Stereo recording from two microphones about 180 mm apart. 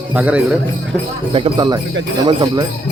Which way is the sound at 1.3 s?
30° right (ahead or behind).